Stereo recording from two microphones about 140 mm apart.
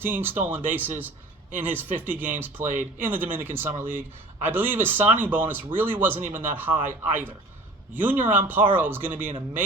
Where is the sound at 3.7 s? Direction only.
55° right (ahead or behind).